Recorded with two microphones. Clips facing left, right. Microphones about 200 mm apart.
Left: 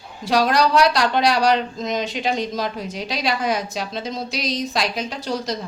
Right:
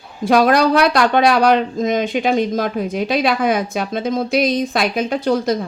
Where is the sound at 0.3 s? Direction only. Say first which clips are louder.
Right 5 dB; 55° right (ahead or behind).